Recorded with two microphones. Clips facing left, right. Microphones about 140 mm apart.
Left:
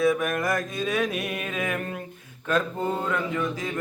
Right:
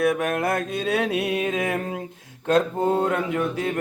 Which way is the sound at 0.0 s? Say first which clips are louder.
Right 1 dB; 70° right (ahead or behind).